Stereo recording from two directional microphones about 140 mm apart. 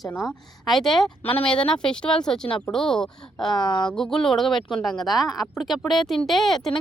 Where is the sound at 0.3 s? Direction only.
Centre (ahead or behind).